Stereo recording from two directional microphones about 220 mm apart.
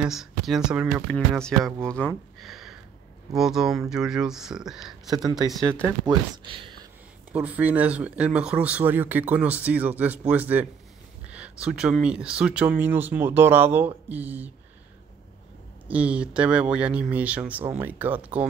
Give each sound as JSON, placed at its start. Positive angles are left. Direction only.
{"t": 0.0, "sound": "speech", "side_deg": 0}
{"t": 1.9, "sound": "a sound", "side_deg": 0}
{"t": 3.3, "sound": "speech", "side_deg": 0}
{"t": 5.9, "sound": "speech", "side_deg": -15}
{"t": 7.3, "sound": "speech", "side_deg": -5}
{"t": 15.9, "sound": "speech", "side_deg": -5}